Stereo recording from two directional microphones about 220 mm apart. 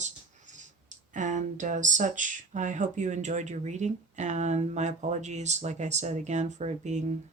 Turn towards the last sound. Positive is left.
turn(degrees=-30)  # may be behind; listen again after turning